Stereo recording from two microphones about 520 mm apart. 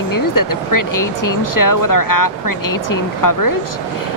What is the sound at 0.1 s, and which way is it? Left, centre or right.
Speech, left.